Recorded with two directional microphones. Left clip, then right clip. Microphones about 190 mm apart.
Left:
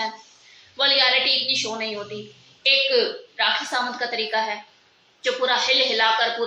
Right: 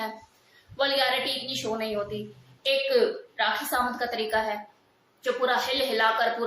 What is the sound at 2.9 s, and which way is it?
A woman's voice, 20° right (ahead or behind).